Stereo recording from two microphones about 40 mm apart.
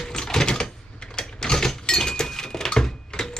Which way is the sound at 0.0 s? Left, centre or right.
Centre.